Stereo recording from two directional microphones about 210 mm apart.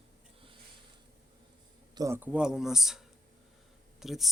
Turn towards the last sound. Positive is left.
turn(degrees=0)  # may be behind; listen again after turning